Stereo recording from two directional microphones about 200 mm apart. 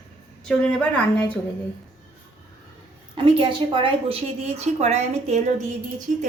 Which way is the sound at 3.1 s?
25° right (ahead or behind).